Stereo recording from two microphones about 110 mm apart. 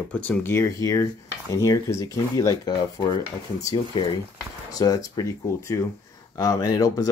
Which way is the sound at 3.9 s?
40° left (ahead or behind).